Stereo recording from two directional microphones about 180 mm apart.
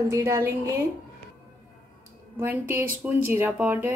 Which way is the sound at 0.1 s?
15° right (ahead or behind).